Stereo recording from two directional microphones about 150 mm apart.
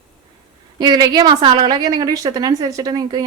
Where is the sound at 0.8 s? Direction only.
30° right (ahead or behind).